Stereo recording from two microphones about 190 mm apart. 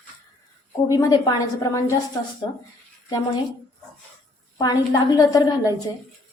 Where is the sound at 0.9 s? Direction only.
20° left (ahead or behind).